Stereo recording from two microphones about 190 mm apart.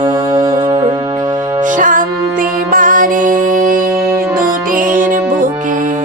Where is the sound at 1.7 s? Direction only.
45° right (ahead or behind).